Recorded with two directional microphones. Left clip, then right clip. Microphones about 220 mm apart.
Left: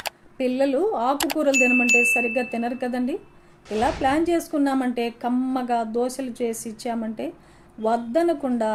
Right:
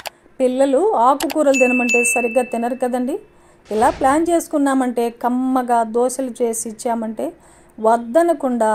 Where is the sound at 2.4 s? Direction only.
25° right (ahead or behind).